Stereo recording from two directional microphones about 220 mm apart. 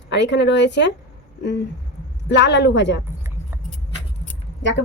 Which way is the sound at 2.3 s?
50° left (ahead or behind).